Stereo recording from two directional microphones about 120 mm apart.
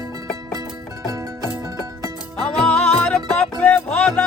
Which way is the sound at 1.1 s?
25° right (ahead or behind).